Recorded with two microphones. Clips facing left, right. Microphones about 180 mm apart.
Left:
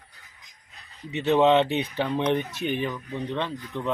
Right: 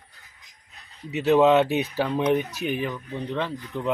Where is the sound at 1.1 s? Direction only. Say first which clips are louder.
Right 2 dB; 5° right (ahead or behind).